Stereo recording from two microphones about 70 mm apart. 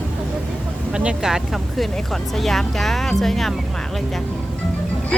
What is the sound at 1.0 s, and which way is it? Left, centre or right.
Speech, centre.